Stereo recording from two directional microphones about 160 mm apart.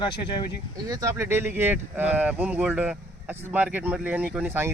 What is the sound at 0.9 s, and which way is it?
Speech, 20° right (ahead or behind).